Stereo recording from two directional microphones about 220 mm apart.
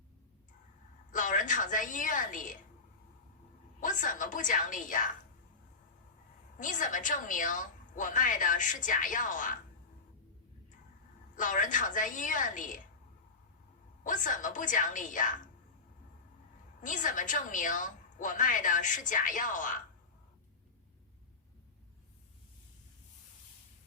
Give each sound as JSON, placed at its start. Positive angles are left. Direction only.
{"t": 1.1, "sound": "a woman's voice", "side_deg": 35}
{"t": 3.8, "sound": "a woman's voice", "side_deg": 35}
{"t": 6.6, "sound": "a woman's voice", "side_deg": 35}
{"t": 11.3, "sound": "a woman's voice", "side_deg": 35}
{"t": 14.0, "sound": "a woman's voice", "side_deg": 35}
{"t": 16.8, "sound": "a woman's voice", "side_deg": 35}